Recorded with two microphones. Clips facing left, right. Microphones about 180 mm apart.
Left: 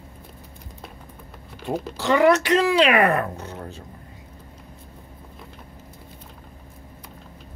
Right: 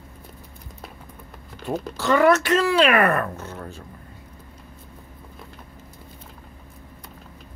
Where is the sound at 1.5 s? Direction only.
10° left (ahead or behind).